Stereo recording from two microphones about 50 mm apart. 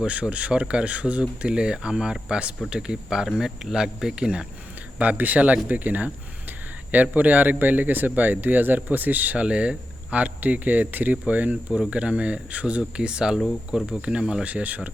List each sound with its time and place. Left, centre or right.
0.0 s speech: right
4.9 s speech: right
9.4 s speech: right
14.4 s speech: right